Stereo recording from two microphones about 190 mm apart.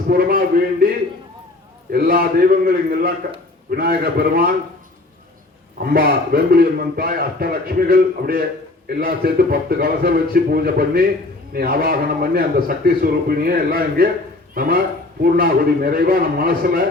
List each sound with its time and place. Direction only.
0.1 s a man's voice: 50° right (ahead or behind)
1.9 s a man's voice: 50° right (ahead or behind)
5.8 s a man's voice: 50° right (ahead or behind)